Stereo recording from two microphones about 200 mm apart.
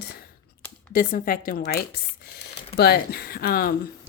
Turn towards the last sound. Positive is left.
turn(degrees=50)  # may be behind; listen again after turning